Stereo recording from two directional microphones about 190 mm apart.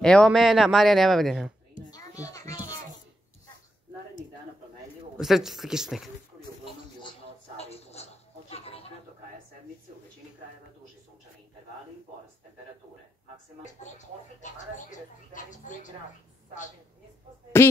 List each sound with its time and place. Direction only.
0.0 s speech: 5° left (ahead or behind)
1.9 s music: 20° left (ahead or behind)
5.1 s speech: centre (ahead or behind)
6.6 s a sound: 25° left (ahead or behind)
13.9 s television: 40° left (ahead or behind)
15.3 s a woman's voice: 40° left (ahead or behind)